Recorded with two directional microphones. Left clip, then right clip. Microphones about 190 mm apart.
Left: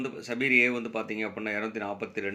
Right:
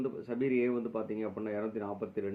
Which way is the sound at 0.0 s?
15° left (ahead or behind).